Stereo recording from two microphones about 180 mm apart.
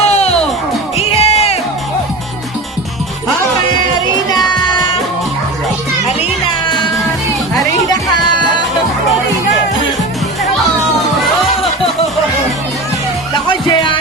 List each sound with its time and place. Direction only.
0.0 s music: 35° left (ahead or behind)
4.3 s child singing: 20° left (ahead or behind)
13.5 s music: 30° left (ahead or behind)